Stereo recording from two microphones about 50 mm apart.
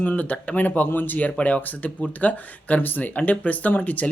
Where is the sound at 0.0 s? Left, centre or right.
Left.